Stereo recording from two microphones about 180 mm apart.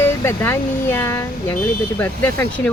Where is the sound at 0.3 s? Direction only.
15° left (ahead or behind).